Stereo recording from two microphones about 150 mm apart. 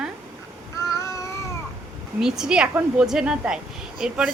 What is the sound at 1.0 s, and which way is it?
Cat, 20° left (ahead or behind).